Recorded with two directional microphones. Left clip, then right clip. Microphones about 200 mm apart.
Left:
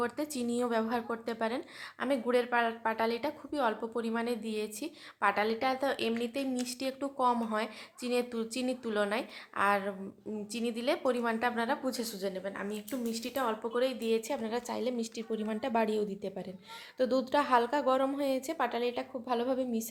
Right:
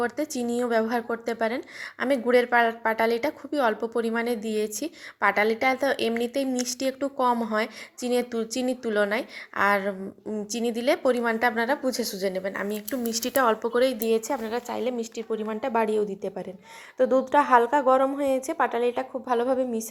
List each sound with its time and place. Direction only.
0.0 s a woman's voice: 15° right (ahead or behind)
14.2 s a woman's voice: centre (ahead or behind)
14.4 s a woman's voice: 10° left (ahead or behind)